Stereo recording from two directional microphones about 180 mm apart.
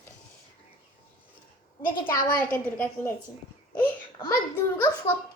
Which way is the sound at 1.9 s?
15° left (ahead or behind).